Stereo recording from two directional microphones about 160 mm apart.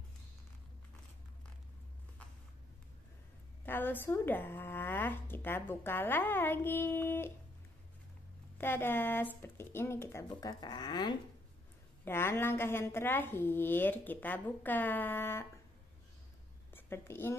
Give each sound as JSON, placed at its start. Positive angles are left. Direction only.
{"t": 3.6, "sound": "speech", "side_deg": 15}
{"t": 8.5, "sound": "speech", "side_deg": 15}
{"t": 12.0, "sound": "speech", "side_deg": 15}
{"t": 16.7, "sound": "a woman's voice", "side_deg": 15}